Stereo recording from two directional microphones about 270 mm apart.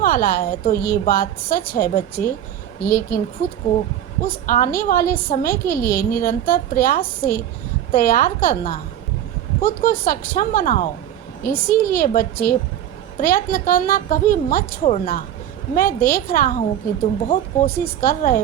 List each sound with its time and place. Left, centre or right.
0.0 s a woman's voice: left
4.3 s a woman's voice: left
9.8 s a woman's voice: left